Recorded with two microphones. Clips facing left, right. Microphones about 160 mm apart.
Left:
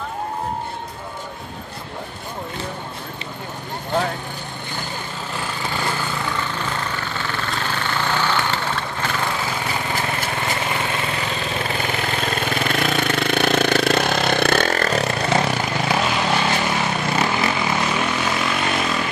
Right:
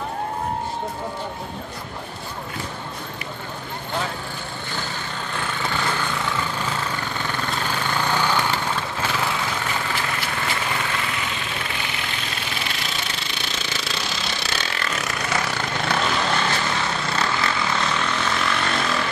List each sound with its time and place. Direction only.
8.0 s vehicle: 10° right (ahead or behind)
11.2 s engine: 45° left (ahead or behind)
15.5 s vehicle: 10° left (ahead or behind)